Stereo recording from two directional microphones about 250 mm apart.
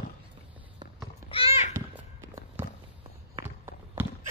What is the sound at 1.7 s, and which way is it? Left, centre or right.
Walk, centre.